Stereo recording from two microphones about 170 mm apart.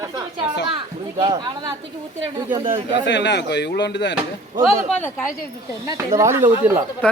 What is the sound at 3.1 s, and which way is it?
Speech, 90° left.